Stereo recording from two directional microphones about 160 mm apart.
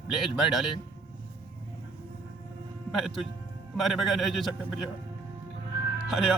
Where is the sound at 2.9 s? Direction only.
Centre (ahead or behind).